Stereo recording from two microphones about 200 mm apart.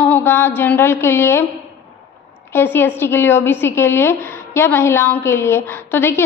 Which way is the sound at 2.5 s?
10° left (ahead or behind).